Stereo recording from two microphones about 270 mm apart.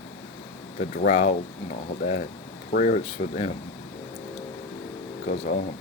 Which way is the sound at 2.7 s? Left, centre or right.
Left.